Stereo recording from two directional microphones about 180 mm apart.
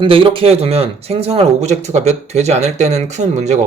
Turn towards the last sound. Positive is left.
turn(degrees=-40)  # may be behind; listen again after turning